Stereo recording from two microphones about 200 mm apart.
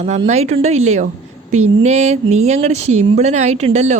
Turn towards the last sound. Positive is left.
turn(degrees=-35)  # may be behind; listen again after turning